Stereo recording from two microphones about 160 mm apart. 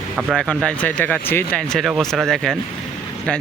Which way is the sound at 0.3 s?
5° left (ahead or behind).